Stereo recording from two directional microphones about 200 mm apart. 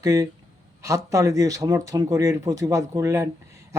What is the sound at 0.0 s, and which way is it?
Speech, 15° right (ahead or behind).